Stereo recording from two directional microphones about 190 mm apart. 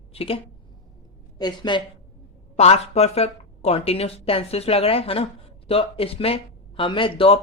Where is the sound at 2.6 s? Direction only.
35° left (ahead or behind).